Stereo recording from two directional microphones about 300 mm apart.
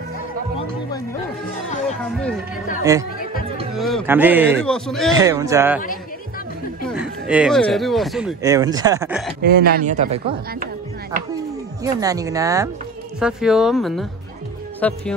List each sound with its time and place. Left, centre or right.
2.8 s speech: centre
3.7 s a man's voice: centre
5.1 s speech: centre
6.9 s speech: centre
8.4 s speech: centre
9.4 s speech: right
11.8 s a man's voice: centre